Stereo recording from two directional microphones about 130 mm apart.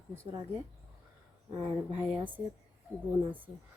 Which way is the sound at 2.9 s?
15° right (ahead or behind).